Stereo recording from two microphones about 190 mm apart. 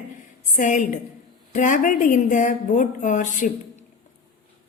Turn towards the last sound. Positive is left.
turn(degrees=40)  # may be behind; listen again after turning